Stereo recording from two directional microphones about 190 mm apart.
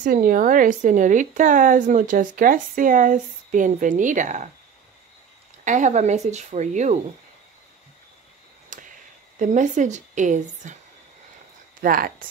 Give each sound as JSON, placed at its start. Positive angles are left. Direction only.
{"t": 0.0, "sound": "a woman's voice", "side_deg": -45}
{"t": 5.6, "sound": "a woman's voice", "side_deg": -40}
{"t": 8.6, "sound": "a sound", "side_deg": -45}
{"t": 9.4, "sound": "a woman's voice", "side_deg": -40}
{"t": 11.8, "sound": "speech", "side_deg": -50}